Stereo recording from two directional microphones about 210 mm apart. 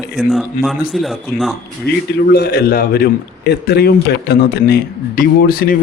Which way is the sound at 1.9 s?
50° left (ahead or behind).